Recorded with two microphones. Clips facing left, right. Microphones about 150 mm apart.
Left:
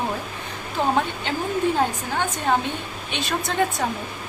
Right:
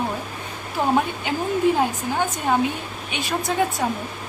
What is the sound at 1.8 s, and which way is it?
Speech, 10° right (ahead or behind).